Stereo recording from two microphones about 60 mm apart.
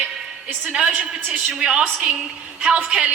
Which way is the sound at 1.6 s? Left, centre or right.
Centre.